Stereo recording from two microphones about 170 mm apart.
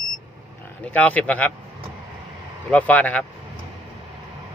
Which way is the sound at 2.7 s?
10° left (ahead or behind).